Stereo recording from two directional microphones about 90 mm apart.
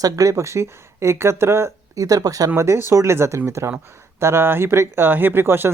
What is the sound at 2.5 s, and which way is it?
Speech, 30° right (ahead or behind).